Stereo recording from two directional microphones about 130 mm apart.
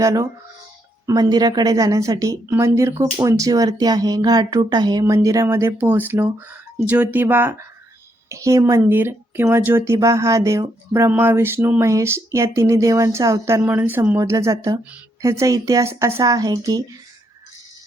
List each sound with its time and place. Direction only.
0.0 s speech: 25° right (ahead or behind)